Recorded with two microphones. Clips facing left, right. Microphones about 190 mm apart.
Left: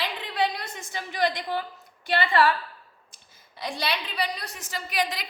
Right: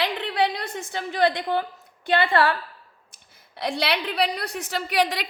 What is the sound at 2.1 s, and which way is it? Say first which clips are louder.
Speech: right 4 dB; 55° right (ahead or behind).